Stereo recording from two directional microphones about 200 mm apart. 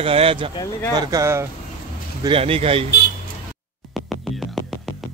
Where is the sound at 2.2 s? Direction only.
30° right (ahead or behind).